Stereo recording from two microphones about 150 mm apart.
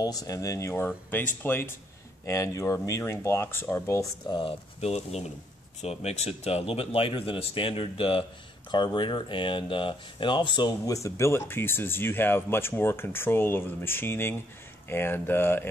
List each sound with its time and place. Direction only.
0.0 s speech: 25° left (ahead or behind)
4.3 s speech: 35° left (ahead or behind); by 15.7 s 15° left (ahead or behind)